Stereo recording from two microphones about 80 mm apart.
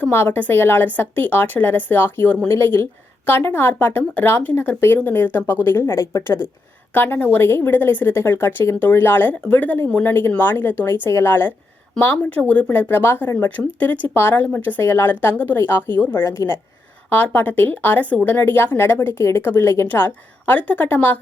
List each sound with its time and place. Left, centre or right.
0.1 s a woman's voice: left
2.6 s a woman's voice: left
5.8 s a woman's voice: left
16.2 s speech: left
17.3 s a woman's voice: left